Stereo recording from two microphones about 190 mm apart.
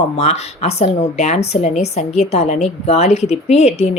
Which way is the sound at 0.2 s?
35° left (ahead or behind).